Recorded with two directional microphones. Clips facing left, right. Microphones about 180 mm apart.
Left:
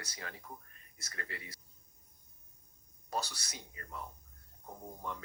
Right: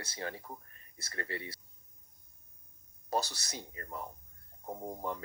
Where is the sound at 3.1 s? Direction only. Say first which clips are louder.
Right 5 dB; 35° right (ahead or behind).